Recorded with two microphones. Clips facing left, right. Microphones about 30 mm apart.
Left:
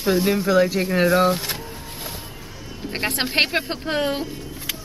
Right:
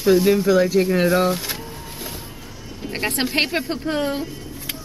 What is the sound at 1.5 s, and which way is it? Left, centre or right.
Vehicle, centre.